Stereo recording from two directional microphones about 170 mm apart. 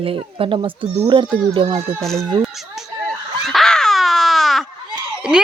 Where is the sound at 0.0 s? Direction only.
30° right (ahead or behind).